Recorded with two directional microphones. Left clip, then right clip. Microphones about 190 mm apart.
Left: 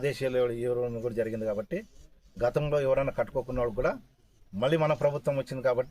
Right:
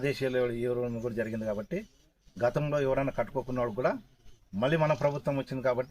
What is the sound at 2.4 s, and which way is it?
A man's voice, 25° left (ahead or behind).